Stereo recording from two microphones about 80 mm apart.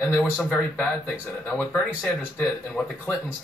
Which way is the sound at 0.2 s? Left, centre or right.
Centre.